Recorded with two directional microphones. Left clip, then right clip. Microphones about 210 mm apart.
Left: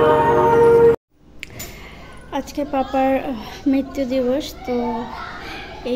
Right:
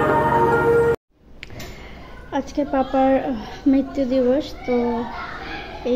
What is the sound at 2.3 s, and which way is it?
A woman's voice, 10° right (ahead or behind).